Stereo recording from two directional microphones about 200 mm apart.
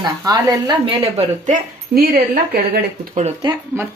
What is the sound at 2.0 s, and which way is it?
Speech, 50° right (ahead or behind).